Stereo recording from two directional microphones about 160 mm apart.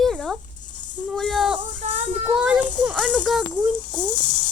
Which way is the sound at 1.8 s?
50° right (ahead or behind).